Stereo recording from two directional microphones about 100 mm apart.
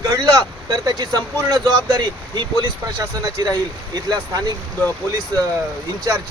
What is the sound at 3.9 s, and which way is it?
Speech, 40° right (ahead or behind).